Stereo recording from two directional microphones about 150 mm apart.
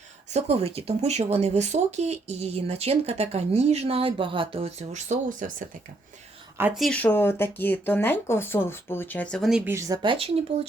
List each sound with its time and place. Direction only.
0.3 s speech: 45° right (ahead or behind)
6.7 s speech: 5° left (ahead or behind)
9.5 s speech: 5° right (ahead or behind)
9.7 s speech: 25° right (ahead or behind); by 10.7 s 40° right (ahead or behind)